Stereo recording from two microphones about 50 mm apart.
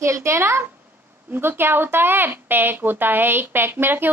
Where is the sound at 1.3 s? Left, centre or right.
Right.